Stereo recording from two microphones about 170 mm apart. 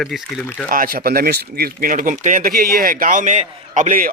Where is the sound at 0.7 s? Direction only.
60° right (ahead or behind).